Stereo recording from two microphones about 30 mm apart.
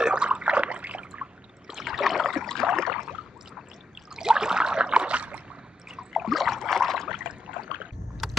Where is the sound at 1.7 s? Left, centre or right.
Centre.